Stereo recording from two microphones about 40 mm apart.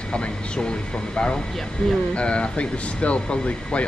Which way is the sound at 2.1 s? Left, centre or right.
Left.